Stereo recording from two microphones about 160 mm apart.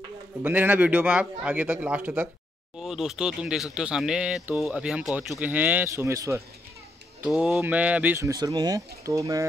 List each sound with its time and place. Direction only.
0.4 s a man's voice: 10° right (ahead or behind)
7.2 s speech: 5° right (ahead or behind); by 9.5 s 20° right (ahead or behind)